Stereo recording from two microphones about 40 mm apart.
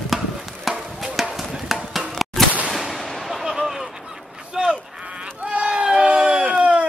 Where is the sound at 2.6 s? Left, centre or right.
Centre.